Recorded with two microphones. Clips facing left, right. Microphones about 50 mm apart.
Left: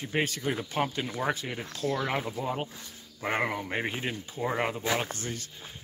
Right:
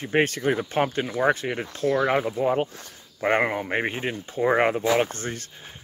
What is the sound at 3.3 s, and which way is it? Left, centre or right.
Speech, right.